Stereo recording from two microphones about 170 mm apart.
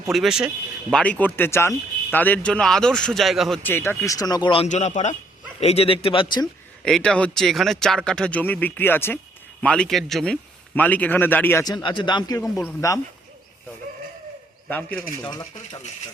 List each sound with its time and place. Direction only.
0.1 s speech: centre (ahead or behind)
3.6 s speech: 10° left (ahead or behind); by 4.7 s 30° left (ahead or behind)
4.7 s a man's voice: 45° left (ahead or behind); by 6.5 s 25° left (ahead or behind)
6.8 s speech: 5° left (ahead or behind)
11.6 s speech: 25° left (ahead or behind)
14.7 s speech: 10° left (ahead or behind)
15.3 s speech: 25° left (ahead or behind)